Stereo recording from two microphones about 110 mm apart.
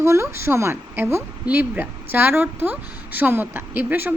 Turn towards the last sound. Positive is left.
turn(degrees=-15)  # may be behind; listen again after turning